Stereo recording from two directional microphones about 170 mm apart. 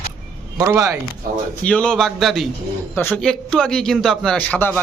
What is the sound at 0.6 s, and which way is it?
Speech, 15° right (ahead or behind).